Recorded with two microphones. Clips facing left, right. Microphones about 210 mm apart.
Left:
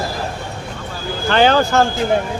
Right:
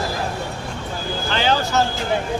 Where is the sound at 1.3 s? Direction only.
55° left (ahead or behind).